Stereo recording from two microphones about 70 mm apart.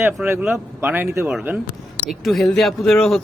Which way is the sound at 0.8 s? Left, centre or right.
Right.